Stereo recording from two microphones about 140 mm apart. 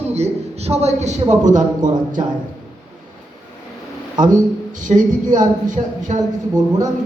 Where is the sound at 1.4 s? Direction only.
65° right (ahead or behind).